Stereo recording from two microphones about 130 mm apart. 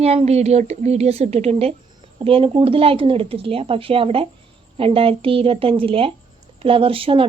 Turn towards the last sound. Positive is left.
turn(degrees=-45)  # may be behind; listen again after turning